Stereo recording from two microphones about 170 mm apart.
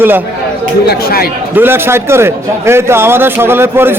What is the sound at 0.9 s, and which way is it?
Speech, 65° left (ahead or behind).